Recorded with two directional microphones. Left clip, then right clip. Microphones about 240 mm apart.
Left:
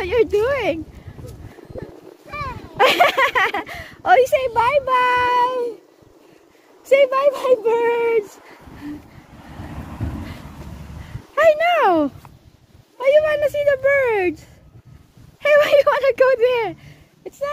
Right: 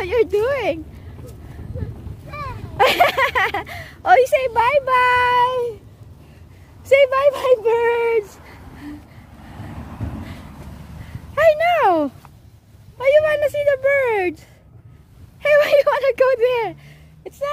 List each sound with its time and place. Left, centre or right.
0.0 s speech: centre
2.2 s speech: centre
6.9 s speech: centre
8.5 s a sound: right
11.0 s a sound: centre
12.9 s speech: centre
15.4 s speech: centre